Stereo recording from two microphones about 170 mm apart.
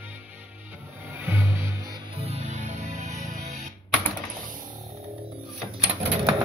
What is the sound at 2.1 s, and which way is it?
Music, 35° right (ahead or behind).